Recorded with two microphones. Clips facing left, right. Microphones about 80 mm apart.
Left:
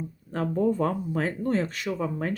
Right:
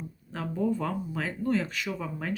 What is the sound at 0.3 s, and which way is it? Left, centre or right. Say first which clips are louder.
Speech: left 4 dB; left.